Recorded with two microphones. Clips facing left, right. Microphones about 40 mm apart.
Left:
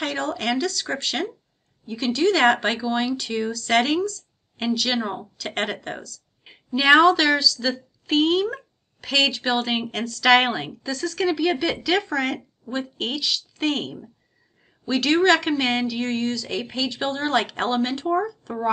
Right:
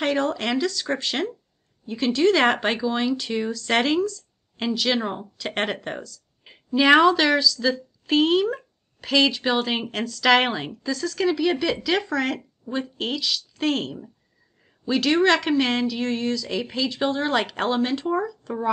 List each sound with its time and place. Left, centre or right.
0.0 s a woman's voice: centre